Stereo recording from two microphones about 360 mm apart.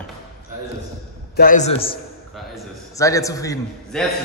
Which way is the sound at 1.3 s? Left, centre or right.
Left.